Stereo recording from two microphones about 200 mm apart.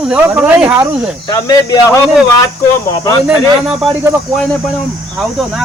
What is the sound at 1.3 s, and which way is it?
Speech, 20° left (ahead or behind).